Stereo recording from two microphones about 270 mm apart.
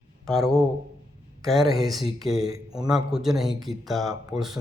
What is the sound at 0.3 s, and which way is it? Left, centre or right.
Speech, centre.